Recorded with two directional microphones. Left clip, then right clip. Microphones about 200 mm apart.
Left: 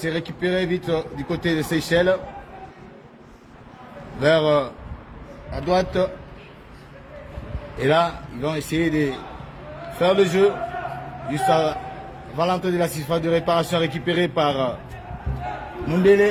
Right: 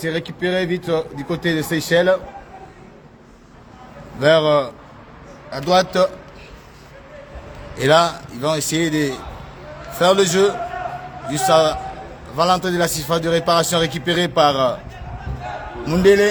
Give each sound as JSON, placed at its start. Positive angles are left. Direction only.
{"t": 0.0, "sound": "a man's voice", "side_deg": -40}
{"t": 4.2, "sound": "a man's voice", "side_deg": -35}
{"t": 7.8, "sound": "a man's voice", "side_deg": -35}
{"t": 15.9, "sound": "a man's voice", "side_deg": -30}